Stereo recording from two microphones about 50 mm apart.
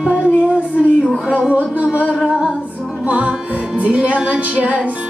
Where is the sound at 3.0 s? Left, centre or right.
Right.